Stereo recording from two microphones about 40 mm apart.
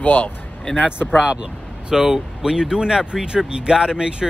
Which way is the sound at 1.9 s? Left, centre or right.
Centre.